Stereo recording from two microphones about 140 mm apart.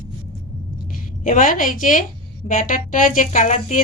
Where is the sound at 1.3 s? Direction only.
70° left (ahead or behind).